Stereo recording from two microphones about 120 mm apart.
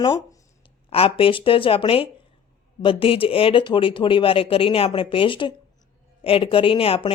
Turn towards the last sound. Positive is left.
turn(degrees=50)  # may be behind; listen again after turning